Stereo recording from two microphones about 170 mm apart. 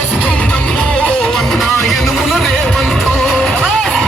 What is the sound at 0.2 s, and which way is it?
Music, 5° left (ahead or behind).